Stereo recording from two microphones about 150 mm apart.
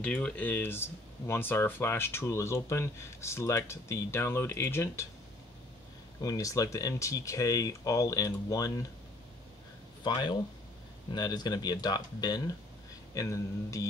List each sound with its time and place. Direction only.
0.0 s speech: 5° left (ahead or behind)
6.2 s speech: 25° left (ahead or behind)
10.0 s speech: 30° left (ahead or behind)